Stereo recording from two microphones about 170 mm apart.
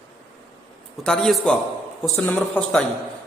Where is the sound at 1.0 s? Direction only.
5° left (ahead or behind).